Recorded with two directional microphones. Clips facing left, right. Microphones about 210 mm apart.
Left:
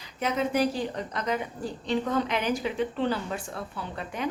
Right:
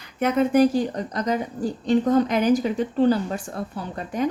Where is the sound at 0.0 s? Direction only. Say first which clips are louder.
Right 7 dB; 55° right (ahead or behind).